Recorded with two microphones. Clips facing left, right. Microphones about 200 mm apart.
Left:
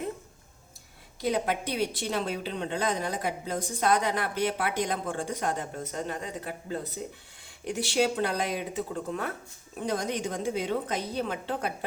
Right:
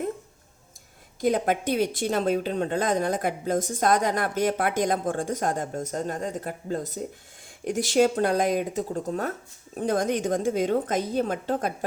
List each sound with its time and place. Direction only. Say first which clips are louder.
1.2 s a woman's voice: right 5 dB; 50° right (ahead or behind)